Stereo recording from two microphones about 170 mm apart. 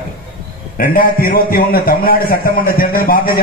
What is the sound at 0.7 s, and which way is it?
A man's voice, 55° left (ahead or behind).